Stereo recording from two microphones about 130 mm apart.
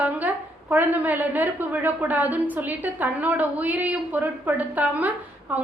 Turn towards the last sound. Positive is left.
turn(degrees=-10)  # may be behind; listen again after turning